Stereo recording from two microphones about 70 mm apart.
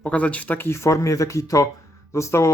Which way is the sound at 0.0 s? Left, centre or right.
Centre.